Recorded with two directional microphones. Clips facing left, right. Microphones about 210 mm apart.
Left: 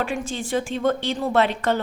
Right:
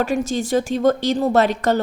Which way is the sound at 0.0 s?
40° right (ahead or behind).